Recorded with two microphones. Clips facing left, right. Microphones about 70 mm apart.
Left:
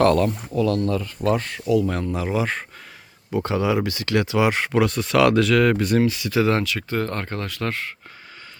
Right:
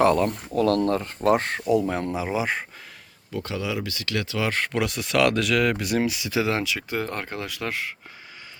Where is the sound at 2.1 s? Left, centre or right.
Centre.